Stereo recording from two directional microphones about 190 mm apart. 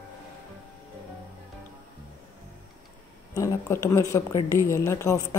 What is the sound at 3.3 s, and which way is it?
Speech, 15° left (ahead or behind).